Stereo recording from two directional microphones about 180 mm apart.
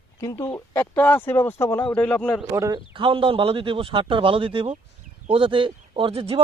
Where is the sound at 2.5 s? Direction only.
20° right (ahead or behind).